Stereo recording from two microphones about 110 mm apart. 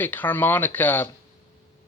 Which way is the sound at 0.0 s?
15° left (ahead or behind).